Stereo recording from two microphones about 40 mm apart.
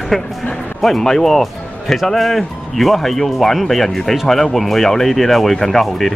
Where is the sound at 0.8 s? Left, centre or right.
Centre.